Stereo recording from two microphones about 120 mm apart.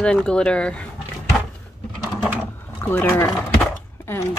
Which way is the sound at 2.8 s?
15° left (ahead or behind).